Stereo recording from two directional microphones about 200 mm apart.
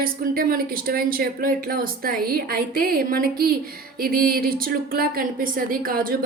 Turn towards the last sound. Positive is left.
turn(degrees=-45)  # may be behind; listen again after turning